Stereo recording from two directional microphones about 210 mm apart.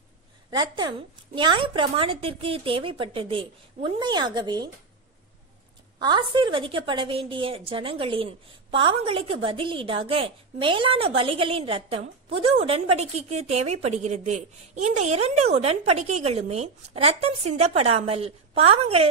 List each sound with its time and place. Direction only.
0.5 s a woman's voice: 20° right (ahead or behind)
5.9 s a woman's voice: 20° right (ahead or behind)